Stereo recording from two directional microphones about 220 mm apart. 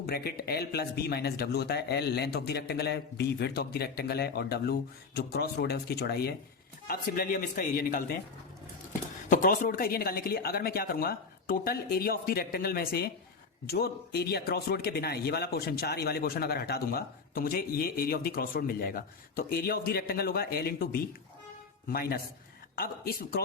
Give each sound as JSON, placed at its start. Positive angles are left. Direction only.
{"t": 0.0, "sound": "speech", "side_deg": 45}
{"t": 9.3, "sound": "speech", "side_deg": 40}